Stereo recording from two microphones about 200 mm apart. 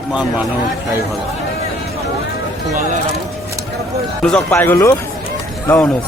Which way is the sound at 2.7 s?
35° right (ahead or behind).